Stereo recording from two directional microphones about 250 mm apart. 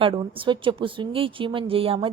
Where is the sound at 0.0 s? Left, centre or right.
Centre.